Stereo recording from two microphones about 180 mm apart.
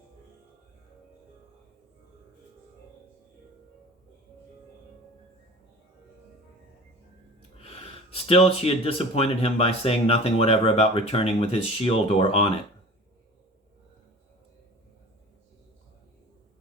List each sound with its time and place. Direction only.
7.6 s speech: 35° left (ahead or behind)